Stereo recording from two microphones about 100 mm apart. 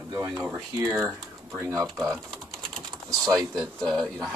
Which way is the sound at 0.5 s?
25° right (ahead or behind).